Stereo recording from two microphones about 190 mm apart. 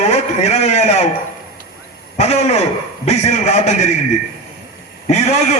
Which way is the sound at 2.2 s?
35° left (ahead or behind).